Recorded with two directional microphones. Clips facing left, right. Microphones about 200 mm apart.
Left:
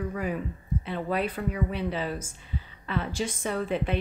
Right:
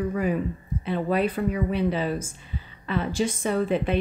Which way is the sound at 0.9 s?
15° right (ahead or behind).